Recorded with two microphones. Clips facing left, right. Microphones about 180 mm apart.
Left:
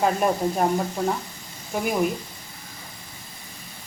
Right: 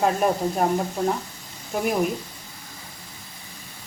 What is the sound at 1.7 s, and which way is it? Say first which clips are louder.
Speech: even; centre (ahead or behind).